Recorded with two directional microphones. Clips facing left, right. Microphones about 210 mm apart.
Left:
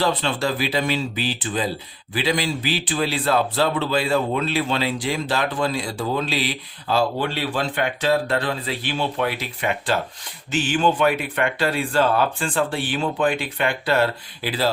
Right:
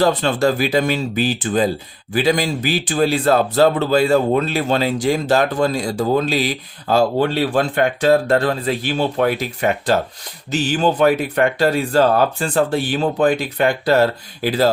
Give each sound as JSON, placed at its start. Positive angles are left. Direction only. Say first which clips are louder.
{"t": 0.0, "sound": "a man's voice", "louder": "right 6 dB", "side_deg": -45}